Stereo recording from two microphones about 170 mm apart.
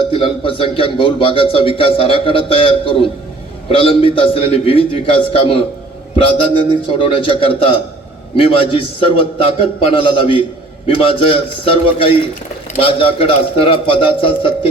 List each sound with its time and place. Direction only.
0.1 s a man's voice: 30° left (ahead or behind)